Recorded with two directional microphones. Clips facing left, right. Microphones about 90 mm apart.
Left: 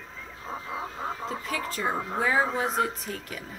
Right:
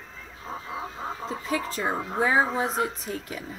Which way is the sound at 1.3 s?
25° right (ahead or behind).